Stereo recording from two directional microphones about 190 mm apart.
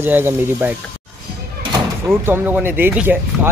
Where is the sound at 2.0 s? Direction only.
10° right (ahead or behind).